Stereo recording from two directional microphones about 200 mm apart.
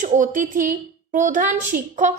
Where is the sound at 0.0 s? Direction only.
40° right (ahead or behind).